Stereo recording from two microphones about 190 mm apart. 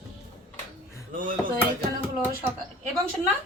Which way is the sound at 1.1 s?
45° right (ahead or behind).